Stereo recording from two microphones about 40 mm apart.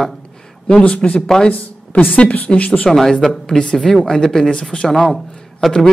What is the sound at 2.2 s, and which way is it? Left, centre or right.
Speech, left.